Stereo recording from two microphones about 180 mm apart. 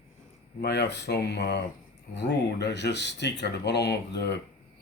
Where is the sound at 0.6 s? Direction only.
70° left (ahead or behind).